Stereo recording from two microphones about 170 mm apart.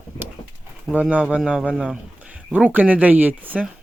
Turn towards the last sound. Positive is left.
turn(degrees=-10)  # may be behind; listen again after turning